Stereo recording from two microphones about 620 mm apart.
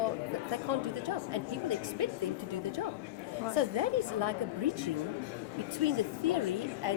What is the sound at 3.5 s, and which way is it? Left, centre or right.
Speech, right.